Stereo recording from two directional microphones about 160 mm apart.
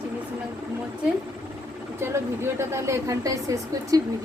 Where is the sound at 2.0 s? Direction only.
15° right (ahead or behind).